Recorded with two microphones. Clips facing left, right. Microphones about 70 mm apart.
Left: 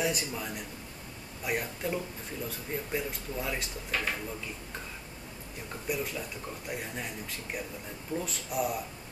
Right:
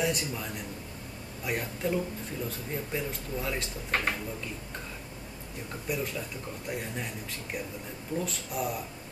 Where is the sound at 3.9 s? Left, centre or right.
Right.